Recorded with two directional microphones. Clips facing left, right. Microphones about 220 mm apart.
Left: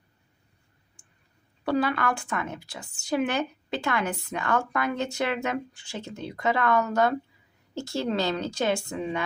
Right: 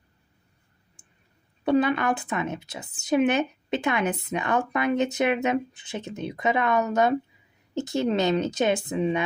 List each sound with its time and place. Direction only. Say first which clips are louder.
1.0 s clicking: right 2 dB; 20° right (ahead or behind)
1.6 s a woman's voice: right 4 dB; 20° right (ahead or behind)